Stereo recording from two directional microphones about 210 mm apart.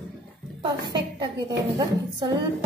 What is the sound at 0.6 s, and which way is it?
A woman's voice, 20° right (ahead or behind).